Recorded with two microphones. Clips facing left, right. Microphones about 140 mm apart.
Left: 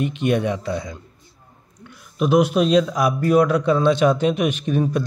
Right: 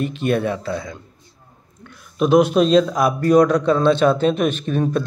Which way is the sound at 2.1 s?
10° left (ahead or behind).